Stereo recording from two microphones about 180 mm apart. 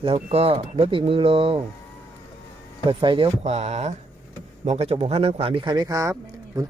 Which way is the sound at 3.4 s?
40° right (ahead or behind).